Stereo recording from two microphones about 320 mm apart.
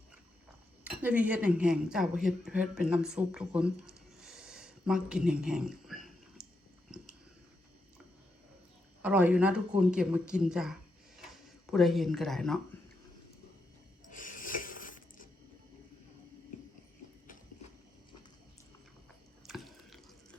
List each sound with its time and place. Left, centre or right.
0.9 s speech: centre
4.2 s a sound: centre
9.0 s speech: centre
14.1 s rub: left
19.5 s drip: centre